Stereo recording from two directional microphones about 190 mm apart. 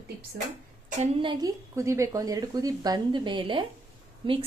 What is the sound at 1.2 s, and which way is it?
A woman's voice, 20° right (ahead or behind).